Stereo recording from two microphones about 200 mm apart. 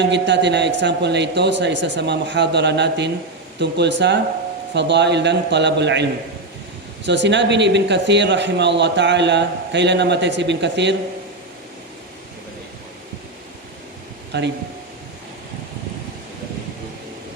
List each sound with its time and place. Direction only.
0.0 s a man's voice: 60° right (ahead or behind)
14.3 s a man's voice: 60° right (ahead or behind)